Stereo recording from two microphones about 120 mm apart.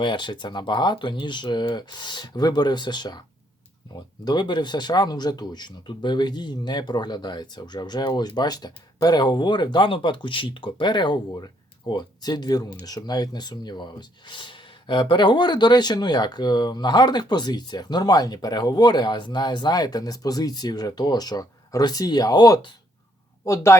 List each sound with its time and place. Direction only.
0.0 s speech: 40° left (ahead or behind)